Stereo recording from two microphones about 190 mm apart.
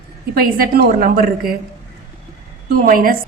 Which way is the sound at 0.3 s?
50° right (ahead or behind).